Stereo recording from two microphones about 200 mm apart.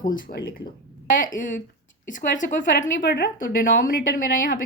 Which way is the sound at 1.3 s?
40° left (ahead or behind).